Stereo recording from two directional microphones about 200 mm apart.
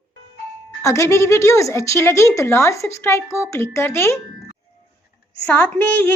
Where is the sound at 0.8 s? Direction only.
15° left (ahead or behind).